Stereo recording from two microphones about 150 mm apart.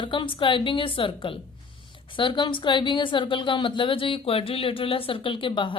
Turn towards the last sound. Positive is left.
turn(degrees=35)  # may be behind; listen again after turning